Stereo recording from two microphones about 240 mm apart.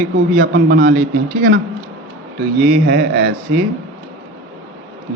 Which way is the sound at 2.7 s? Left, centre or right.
Right.